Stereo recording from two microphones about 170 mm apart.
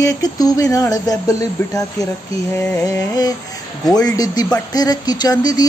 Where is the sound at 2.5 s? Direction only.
15° left (ahead or behind).